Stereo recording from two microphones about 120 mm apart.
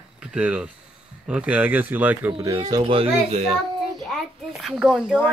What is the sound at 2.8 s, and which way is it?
Speech, 50° right (ahead or behind).